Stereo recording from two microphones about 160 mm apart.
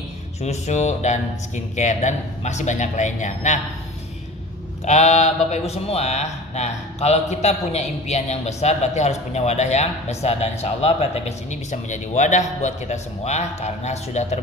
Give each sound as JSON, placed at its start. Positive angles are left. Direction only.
{"t": 0.4, "sound": "speech", "side_deg": 45}
{"t": 4.8, "sound": "speech", "side_deg": 45}